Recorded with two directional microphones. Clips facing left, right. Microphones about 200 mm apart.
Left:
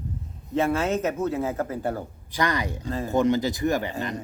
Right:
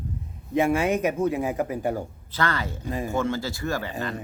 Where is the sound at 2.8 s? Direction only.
15° right (ahead or behind).